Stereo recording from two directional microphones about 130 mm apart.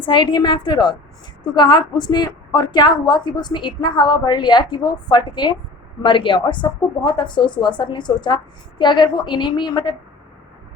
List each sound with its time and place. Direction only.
0.0 s a woman's voice: 40° left (ahead or behind)